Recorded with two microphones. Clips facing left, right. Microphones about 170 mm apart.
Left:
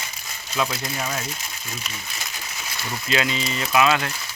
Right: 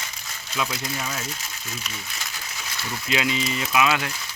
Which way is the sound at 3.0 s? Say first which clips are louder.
Even; 10° right (ahead or behind).